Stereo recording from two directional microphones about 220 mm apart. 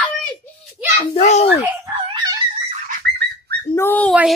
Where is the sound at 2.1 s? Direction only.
15° right (ahead or behind).